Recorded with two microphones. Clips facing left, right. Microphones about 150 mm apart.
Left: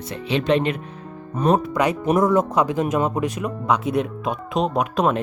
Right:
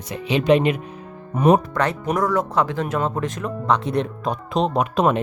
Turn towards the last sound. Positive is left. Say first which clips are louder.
# right 1 dB
turn(degrees=0)  # may be behind; listen again after turning